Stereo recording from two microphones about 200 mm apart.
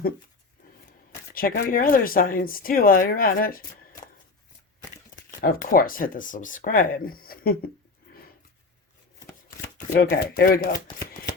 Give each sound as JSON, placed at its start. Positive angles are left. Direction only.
{"t": 1.3, "sound": "speech", "side_deg": 45}
{"t": 5.1, "sound": "speech", "side_deg": 45}
{"t": 9.9, "sound": "speech", "side_deg": 50}